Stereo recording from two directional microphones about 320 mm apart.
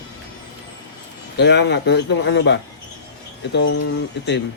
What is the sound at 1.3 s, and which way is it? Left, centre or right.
Speech, left.